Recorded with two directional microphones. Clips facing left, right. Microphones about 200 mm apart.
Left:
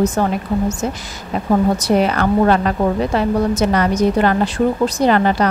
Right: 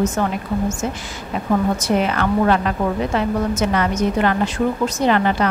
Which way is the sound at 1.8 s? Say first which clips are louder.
Left 3 dB; 35° left (ahead or behind).